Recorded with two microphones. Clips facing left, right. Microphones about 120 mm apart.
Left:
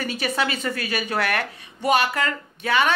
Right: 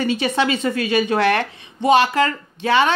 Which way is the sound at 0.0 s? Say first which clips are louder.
Right 6 dB; 25° right (ahead or behind).